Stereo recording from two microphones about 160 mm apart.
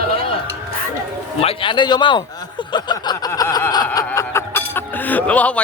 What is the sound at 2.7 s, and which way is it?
Snicker, 25° left (ahead or behind).